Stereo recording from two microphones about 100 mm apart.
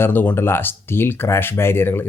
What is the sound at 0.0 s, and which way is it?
Speech, 20° left (ahead or behind).